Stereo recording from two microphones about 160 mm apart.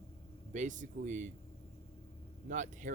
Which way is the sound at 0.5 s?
50° right (ahead or behind).